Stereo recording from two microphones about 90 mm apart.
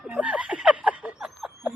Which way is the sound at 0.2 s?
15° right (ahead or behind).